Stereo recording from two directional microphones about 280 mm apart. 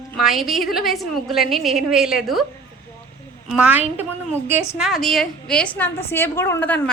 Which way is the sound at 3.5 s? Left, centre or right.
Centre.